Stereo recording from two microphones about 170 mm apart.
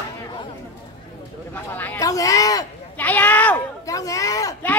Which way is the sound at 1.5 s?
10° left (ahead or behind).